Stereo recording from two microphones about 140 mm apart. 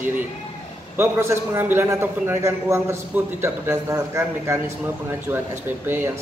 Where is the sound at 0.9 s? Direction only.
15° right (ahead or behind).